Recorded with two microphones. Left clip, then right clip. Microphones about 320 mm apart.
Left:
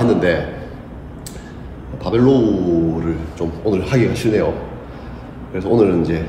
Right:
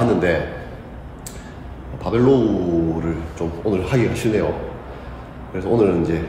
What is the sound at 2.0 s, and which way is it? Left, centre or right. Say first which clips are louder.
Speech: left 2 dB; centre.